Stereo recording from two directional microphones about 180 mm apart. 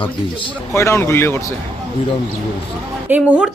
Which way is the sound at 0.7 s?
15° left (ahead or behind).